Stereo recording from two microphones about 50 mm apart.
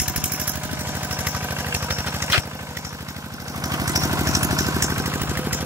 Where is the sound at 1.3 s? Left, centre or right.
Right.